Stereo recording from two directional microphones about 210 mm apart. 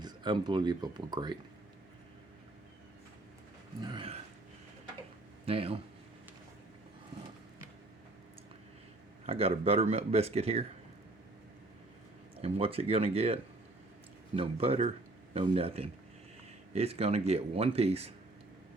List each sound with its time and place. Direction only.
0.0 s speech: 20° right (ahead or behind)
3.8 s a sound: 25° right (ahead or behind)
5.5 s speech: 25° right (ahead or behind)
9.2 s speech: 25° right (ahead or behind)
12.4 s speech: 25° right (ahead or behind)